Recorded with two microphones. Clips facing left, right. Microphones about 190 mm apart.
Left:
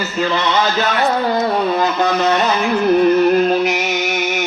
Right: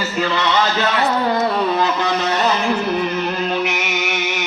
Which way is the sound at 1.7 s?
45° left (ahead or behind).